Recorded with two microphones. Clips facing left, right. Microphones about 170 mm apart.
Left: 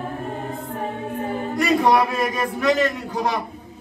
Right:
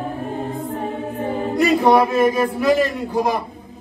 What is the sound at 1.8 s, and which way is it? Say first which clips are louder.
A man's voice: right 5 dB; centre (ahead or behind).